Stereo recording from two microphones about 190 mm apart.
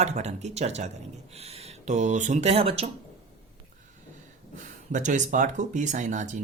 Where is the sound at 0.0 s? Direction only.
35° right (ahead or behind).